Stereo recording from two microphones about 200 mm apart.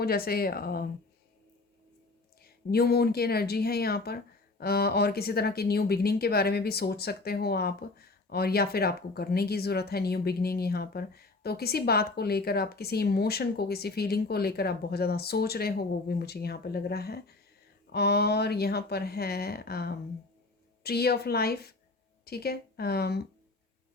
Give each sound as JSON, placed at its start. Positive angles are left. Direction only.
{"t": 0.0, "sound": "speech", "side_deg": 50}
{"t": 2.4, "sound": "speech", "side_deg": 50}